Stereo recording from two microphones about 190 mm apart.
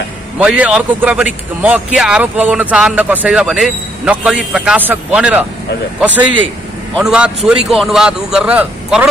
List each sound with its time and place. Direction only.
0.4 s a man's voice: 5° right (ahead or behind)